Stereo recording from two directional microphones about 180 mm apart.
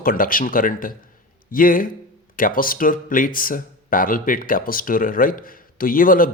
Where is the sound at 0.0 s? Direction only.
50° left (ahead or behind).